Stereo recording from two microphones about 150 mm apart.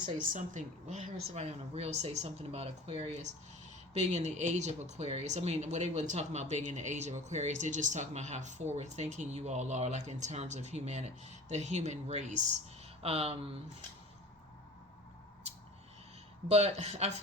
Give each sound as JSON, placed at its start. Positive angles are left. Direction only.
{"t": 0.2, "sound": "a woman's voice", "side_deg": -55}
{"t": 1.3, "sound": "speech", "side_deg": -45}
{"t": 13.0, "sound": "speech", "side_deg": -40}
{"t": 16.5, "sound": "speech", "side_deg": -45}